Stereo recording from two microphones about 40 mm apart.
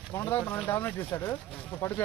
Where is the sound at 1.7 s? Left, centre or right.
Left.